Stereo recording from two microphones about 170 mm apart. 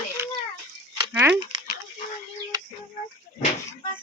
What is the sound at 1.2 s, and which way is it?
Speech, 15° right (ahead or behind).